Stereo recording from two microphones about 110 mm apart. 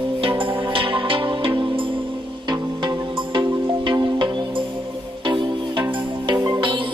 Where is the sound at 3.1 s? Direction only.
50° right (ahead or behind).